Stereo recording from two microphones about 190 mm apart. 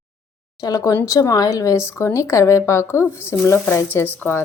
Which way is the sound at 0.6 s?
20° left (ahead or behind).